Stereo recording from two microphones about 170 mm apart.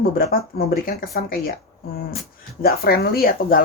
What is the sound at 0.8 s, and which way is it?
Speech, 60° left (ahead or behind).